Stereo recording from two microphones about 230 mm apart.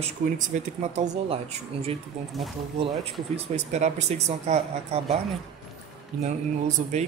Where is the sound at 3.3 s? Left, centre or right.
Right.